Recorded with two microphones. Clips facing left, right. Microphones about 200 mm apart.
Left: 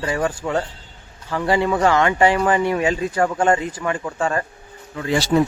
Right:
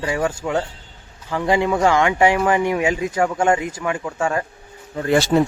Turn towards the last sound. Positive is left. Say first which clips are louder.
# right 4 dB
turn(degrees=-50)  # may be behind; listen again after turning